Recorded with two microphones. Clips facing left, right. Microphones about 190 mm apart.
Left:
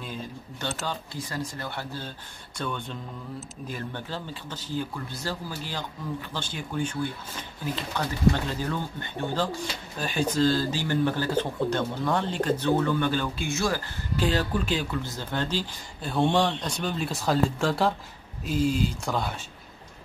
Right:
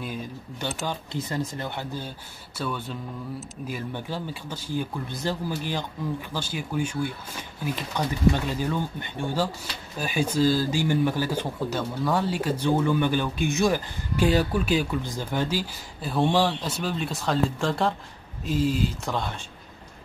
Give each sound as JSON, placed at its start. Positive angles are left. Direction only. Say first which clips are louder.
{"t": 0.0, "sound": "speech", "louder": "right 3 dB", "side_deg": -15}